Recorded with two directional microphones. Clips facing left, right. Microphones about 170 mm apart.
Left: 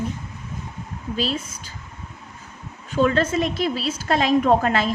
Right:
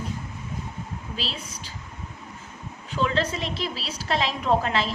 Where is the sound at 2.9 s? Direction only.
50° left (ahead or behind).